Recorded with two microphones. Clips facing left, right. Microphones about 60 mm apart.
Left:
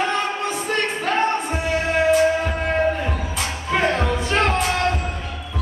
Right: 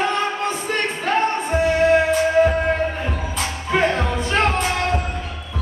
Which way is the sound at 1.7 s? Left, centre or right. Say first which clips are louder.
Right 1 dB; centre.